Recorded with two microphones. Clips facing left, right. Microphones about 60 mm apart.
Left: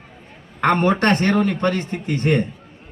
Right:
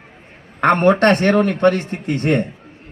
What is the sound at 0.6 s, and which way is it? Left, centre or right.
A man's voice, right.